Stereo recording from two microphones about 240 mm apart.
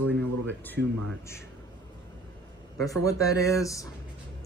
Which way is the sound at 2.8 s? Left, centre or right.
Centre.